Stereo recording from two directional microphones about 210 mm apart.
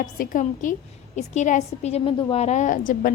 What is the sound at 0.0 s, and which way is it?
A woman's voice, 40° left (ahead or behind).